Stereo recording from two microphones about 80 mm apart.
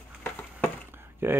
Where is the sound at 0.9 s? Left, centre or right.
Right.